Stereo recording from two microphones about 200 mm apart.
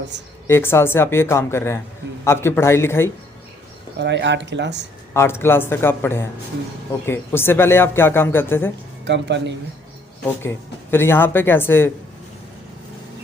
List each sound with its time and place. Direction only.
0.4 s speech: 10° left (ahead or behind)
3.9 s speech: 60° right (ahead or behind)
5.1 s speech: 10° left (ahead or behind)
9.0 s speech: 60° right (ahead or behind)
10.9 s speech: 10° left (ahead or behind)